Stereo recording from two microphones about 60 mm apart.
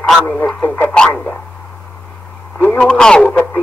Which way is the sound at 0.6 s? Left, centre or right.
Left.